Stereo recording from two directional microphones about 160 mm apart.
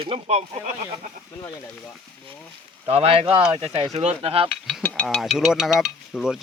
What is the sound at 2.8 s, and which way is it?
Speech, 35° right (ahead or behind).